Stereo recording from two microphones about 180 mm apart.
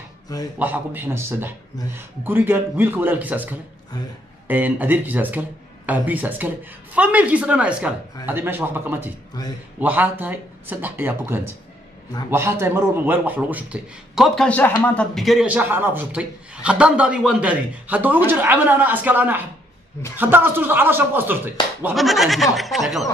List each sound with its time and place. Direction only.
0.6 s speech: 10° right (ahead or behind)
9.4 s a man's voice: 20° left (ahead or behind)
9.8 s speech: 10° right (ahead or behind)
21.9 s speech: centre (ahead or behind)